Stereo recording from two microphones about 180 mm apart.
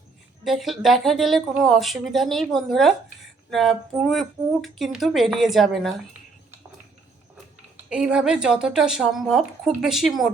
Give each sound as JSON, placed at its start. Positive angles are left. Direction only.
{"t": 0.4, "sound": "speech", "side_deg": 0}
{"t": 7.9, "sound": "speech", "side_deg": -5}